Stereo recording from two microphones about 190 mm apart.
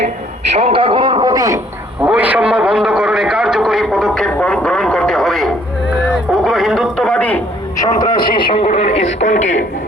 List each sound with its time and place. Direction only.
0.5 s speech: 30° right (ahead or behind)
2.0 s a man's voice: 5° right (ahead or behind)
6.3 s radio: centre (ahead or behind)
7.9 s speech: 25° left (ahead or behind); by 9.6 s 40° left (ahead or behind)